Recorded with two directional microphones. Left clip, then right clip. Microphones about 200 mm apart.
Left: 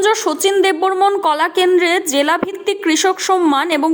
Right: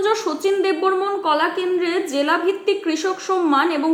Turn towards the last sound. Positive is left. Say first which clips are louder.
# left 3 dB
turn(degrees=40)  # may be behind; listen again after turning